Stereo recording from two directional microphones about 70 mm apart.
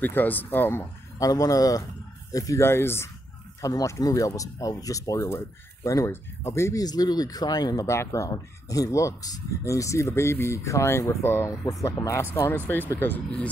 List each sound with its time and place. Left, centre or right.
0.0 s speech: left
1.2 s speech: left
2.6 s speech: left
3.6 s speech: left
6.8 s speech: left
7.8 s speech: left
12.6 s speech: left